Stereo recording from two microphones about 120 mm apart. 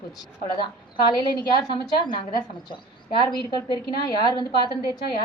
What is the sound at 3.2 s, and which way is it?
A woman's voice, 35° left (ahead or behind).